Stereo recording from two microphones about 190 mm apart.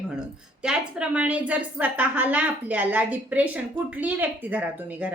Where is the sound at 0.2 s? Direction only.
5° right (ahead or behind).